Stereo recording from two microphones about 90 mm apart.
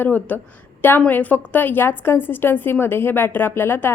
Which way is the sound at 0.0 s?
20° left (ahead or behind).